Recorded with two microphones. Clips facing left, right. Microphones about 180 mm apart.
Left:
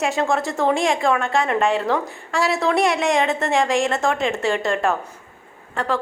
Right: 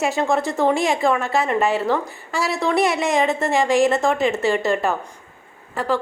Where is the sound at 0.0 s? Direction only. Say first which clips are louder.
Right 1 dB; centre (ahead or behind).